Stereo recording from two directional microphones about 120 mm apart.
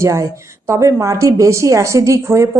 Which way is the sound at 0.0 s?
25° right (ahead or behind).